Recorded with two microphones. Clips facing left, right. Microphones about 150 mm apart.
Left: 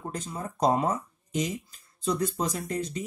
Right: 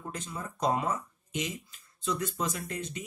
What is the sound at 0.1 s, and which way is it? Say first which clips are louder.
Speech: left 4 dB; 40° left (ahead or behind).